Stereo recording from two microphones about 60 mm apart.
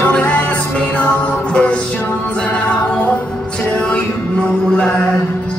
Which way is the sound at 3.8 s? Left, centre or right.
Centre.